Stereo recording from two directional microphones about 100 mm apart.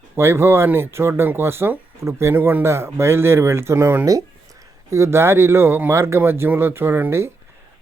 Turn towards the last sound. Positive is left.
turn(degrees=-25)  # may be behind; listen again after turning